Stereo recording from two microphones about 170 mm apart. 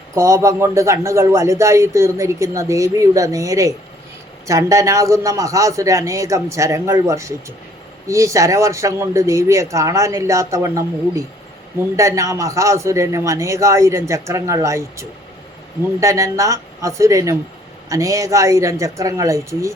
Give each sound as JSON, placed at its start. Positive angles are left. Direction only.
{"t": 0.1, "sound": "a man's voice", "side_deg": -15}